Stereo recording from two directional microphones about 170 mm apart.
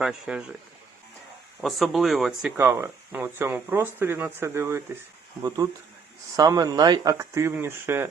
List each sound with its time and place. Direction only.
0.0 s speech: 5° right (ahead or behind)
1.6 s speech: centre (ahead or behind)
2.6 s speech: 15° right (ahead or behind)